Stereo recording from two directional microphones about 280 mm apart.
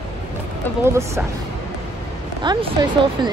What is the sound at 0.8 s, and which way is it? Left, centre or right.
Speech, centre.